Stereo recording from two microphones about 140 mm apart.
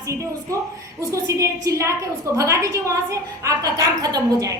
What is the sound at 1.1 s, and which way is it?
A woman's voice, 20° right (ahead or behind).